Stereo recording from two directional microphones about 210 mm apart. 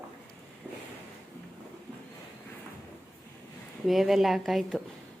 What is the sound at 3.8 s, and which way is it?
Speech, centre (ahead or behind).